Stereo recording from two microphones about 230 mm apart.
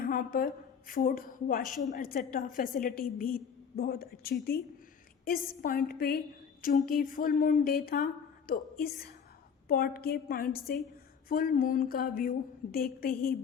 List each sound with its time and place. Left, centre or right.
0.0 s a woman's voice: left